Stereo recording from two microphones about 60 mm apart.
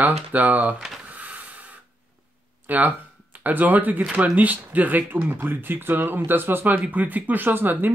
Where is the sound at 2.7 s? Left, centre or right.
Right.